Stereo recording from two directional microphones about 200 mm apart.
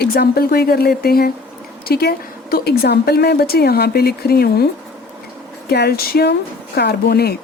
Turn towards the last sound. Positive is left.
turn(degrees=50)  # may be behind; listen again after turning